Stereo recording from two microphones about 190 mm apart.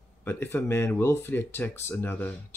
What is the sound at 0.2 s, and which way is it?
Speech, 10° left (ahead or behind).